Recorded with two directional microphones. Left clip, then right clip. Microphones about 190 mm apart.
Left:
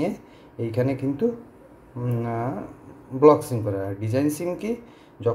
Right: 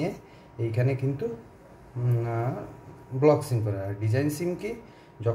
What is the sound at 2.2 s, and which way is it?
Speech, 30° left (ahead or behind).